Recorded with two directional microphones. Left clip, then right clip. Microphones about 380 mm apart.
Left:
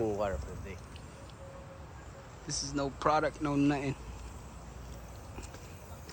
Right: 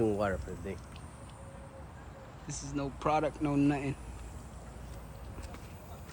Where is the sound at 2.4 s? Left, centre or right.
Centre.